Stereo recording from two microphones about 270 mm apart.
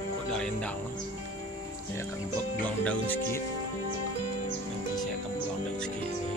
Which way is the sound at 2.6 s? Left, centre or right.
Centre.